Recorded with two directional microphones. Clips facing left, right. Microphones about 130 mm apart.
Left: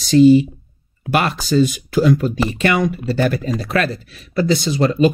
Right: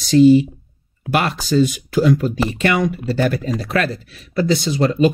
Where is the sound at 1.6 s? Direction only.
35° left (ahead or behind).